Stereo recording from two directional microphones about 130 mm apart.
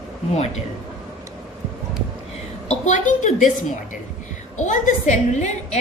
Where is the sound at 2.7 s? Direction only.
65° left (ahead or behind).